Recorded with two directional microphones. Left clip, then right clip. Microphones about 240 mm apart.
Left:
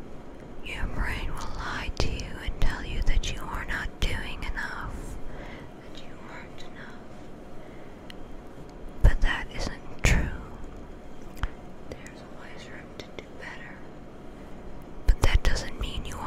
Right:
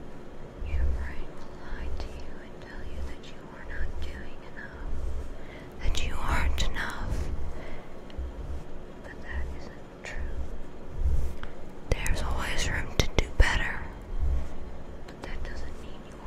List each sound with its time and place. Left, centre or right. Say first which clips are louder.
0.7 s whispering: left 10 dB; left
5.9 s whispering: right 13 dB; right
9.2 s whispering: left 11 dB; left
11.9 s whispering: right 12 dB; right
15.0 s whispering: left 13 dB; left